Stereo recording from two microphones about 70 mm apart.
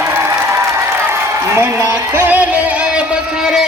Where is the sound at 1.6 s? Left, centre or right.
Right.